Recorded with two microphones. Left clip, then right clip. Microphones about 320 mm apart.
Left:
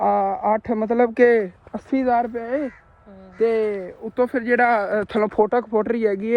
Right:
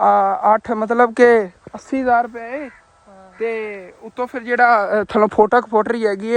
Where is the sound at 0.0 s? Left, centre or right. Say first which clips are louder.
Right 6 dB; right.